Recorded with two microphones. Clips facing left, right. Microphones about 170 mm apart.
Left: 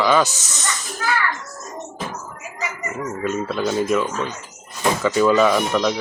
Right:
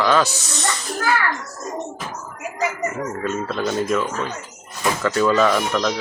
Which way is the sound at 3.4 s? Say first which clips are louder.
Left 2 dB; 5° left (ahead or behind).